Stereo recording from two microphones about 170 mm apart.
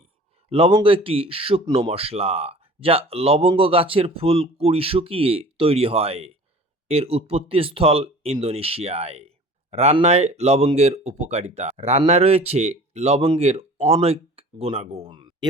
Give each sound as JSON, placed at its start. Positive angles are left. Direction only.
{"t": 0.5, "sound": "speech", "side_deg": -30}